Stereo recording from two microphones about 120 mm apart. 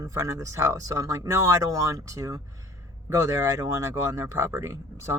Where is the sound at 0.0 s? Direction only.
25° right (ahead or behind).